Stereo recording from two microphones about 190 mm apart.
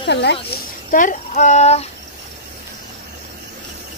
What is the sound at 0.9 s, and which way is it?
Child singing, 45° left (ahead or behind).